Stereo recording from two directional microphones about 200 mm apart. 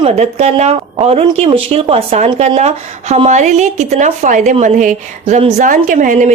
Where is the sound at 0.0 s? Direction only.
35° right (ahead or behind).